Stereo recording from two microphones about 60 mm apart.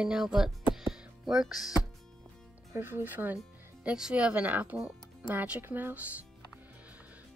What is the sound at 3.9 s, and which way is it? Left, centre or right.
Speech, centre.